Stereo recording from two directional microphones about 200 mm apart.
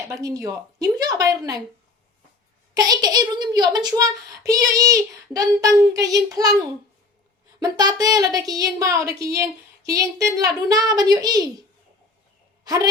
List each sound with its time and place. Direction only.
0.1 s a child's voice: 15° right (ahead or behind)
2.7 s a child's voice: 20° right (ahead or behind)
7.6 s a child's voice: 20° right (ahead or behind)
12.6 s a woman's voice: 20° right (ahead or behind)